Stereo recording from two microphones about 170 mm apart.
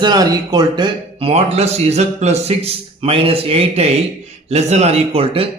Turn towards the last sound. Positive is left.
turn(degrees=-35)  # may be behind; listen again after turning